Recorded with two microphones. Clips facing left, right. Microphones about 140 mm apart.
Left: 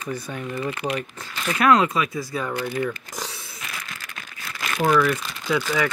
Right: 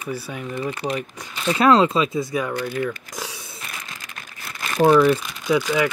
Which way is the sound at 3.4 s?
20° right (ahead or behind).